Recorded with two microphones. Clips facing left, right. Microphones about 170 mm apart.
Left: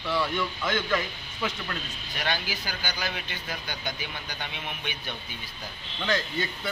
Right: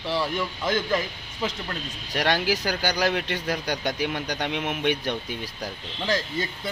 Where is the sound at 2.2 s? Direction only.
80° right.